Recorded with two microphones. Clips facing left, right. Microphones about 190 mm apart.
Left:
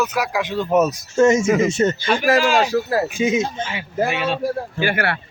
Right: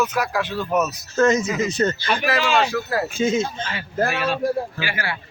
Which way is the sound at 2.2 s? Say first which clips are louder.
Left 4 dB; 45° left (ahead or behind).